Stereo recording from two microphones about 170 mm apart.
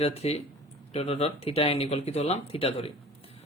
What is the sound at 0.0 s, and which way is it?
Speech, 35° left (ahead or behind).